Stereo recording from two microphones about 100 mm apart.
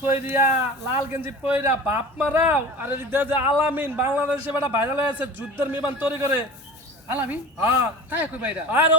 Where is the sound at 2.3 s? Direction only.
20° right (ahead or behind).